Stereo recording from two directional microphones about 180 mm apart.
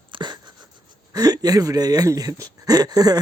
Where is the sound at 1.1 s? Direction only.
20° right (ahead or behind).